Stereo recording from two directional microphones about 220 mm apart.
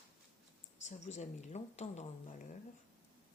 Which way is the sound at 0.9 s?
30° left (ahead or behind).